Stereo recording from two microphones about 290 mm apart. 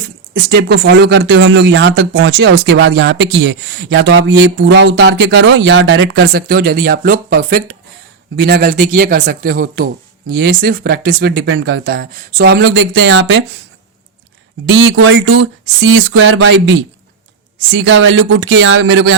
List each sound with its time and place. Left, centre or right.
0.5 s speech: right
14.7 s speech: right
17.7 s speech: right